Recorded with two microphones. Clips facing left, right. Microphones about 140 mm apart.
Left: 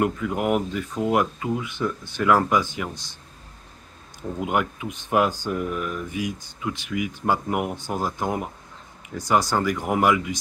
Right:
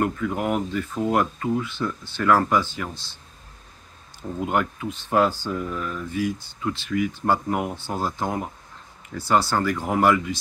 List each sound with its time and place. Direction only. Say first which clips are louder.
0.0 s speech: left 1 dB; 10° left (ahead or behind)
4.4 s speech: right 1 dB; 10° left (ahead or behind)